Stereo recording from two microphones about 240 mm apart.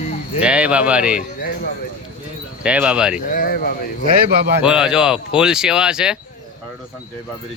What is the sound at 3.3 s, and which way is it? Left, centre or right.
Speech, left.